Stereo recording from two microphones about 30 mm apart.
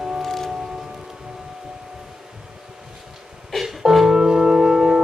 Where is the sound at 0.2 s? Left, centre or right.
Centre.